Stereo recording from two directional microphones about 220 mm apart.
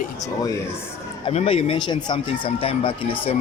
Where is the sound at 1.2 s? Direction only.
25° left (ahead or behind).